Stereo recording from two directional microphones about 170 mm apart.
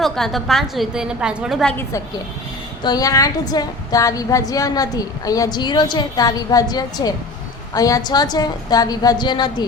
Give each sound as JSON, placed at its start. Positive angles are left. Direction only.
{"t": 0.0, "sound": "a woman's voice", "side_deg": 0}
{"t": 2.8, "sound": "a woman's voice", "side_deg": 20}